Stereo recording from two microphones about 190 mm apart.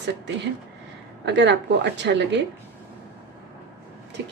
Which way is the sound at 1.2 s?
65° right (ahead or behind).